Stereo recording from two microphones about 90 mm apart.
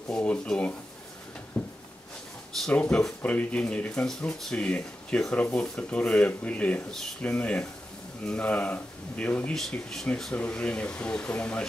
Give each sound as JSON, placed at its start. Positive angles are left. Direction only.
{"t": 0.1, "sound": "speech", "side_deg": 10}
{"t": 1.6, "sound": "a sound", "side_deg": 15}
{"t": 2.7, "sound": "speech", "side_deg": 15}
{"t": 9.5, "sound": "speech", "side_deg": 5}